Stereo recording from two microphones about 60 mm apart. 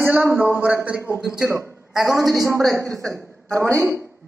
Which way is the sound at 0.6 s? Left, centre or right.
Right.